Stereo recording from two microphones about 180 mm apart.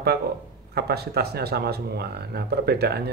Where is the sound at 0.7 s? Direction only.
60° right (ahead or behind).